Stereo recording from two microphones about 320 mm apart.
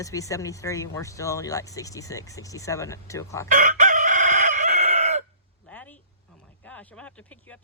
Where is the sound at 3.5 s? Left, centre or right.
Right.